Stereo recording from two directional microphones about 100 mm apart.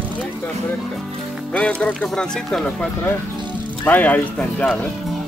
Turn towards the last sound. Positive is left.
turn(degrees=15)  # may be behind; listen again after turning